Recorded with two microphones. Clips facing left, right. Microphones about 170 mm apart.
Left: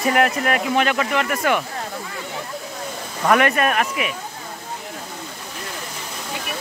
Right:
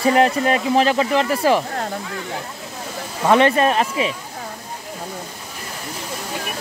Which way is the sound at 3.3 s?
30° right (ahead or behind).